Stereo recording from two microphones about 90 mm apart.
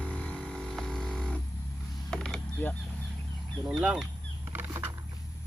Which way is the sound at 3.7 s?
5° right (ahead or behind).